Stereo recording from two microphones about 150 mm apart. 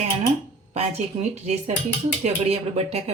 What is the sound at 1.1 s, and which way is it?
Speech, 40° right (ahead or behind).